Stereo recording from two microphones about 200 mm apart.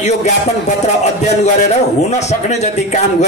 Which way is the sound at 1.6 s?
35° left (ahead or behind).